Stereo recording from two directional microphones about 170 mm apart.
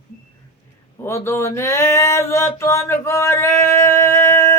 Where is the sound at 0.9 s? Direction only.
15° left (ahead or behind).